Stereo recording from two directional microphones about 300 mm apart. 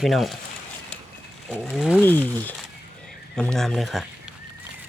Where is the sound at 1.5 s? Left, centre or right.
Centre.